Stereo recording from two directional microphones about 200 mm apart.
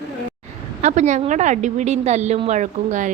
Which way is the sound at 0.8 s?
35° right (ahead or behind).